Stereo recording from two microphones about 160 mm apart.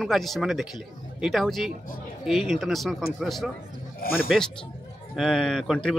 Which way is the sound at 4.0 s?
70° left (ahead or behind).